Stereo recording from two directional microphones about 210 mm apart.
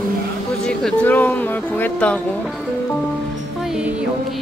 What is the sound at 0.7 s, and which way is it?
Speech, 5° left (ahead or behind).